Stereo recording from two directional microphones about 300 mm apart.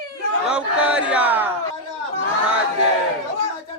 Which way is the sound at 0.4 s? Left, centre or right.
Centre.